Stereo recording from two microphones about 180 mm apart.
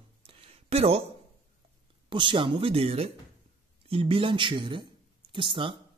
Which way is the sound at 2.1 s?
25° right (ahead or behind).